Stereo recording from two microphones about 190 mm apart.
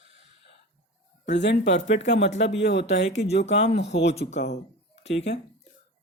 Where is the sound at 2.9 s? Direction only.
35° left (ahead or behind).